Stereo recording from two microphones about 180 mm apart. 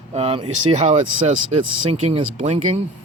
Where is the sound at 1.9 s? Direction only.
35° right (ahead or behind).